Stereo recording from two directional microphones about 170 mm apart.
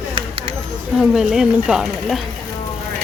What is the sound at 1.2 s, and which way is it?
Speech, 5° right (ahead or behind).